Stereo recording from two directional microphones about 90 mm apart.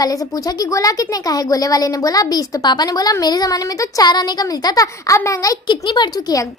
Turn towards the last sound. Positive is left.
turn(degrees=55)  # may be behind; listen again after turning